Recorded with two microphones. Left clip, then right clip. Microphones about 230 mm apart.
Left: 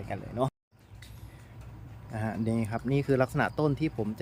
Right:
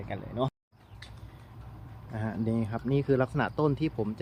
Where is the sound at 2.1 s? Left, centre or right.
Centre.